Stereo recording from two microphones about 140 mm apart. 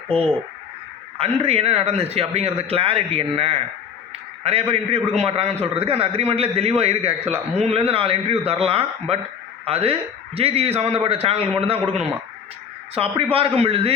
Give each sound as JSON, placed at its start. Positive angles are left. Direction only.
{"t": 0.1, "sound": "speech", "side_deg": 5}
{"t": 1.2, "sound": "a man's voice", "side_deg": -45}
{"t": 12.9, "sound": "a man's voice", "side_deg": -45}